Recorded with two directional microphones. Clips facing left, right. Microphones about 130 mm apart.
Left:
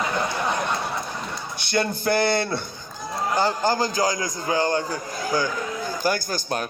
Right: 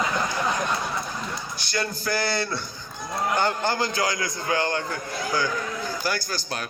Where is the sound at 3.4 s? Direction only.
35° left (ahead or behind).